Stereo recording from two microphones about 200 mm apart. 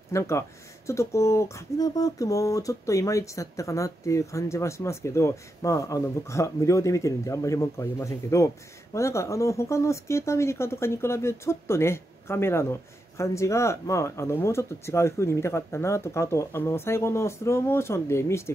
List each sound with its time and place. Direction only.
0.1 s speech: 15° left (ahead or behind)